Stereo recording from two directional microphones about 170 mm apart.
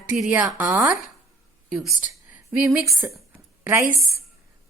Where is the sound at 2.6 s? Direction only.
10° right (ahead or behind).